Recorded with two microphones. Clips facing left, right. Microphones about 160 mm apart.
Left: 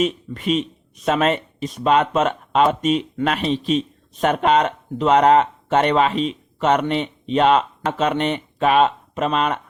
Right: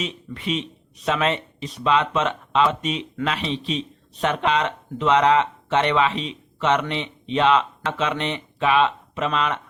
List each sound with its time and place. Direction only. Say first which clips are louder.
0.0 s speech: left 8 dB; 50° left (ahead or behind)